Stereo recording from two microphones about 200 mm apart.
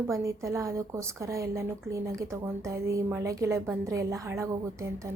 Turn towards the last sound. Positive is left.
turn(degrees=-15)  # may be behind; listen again after turning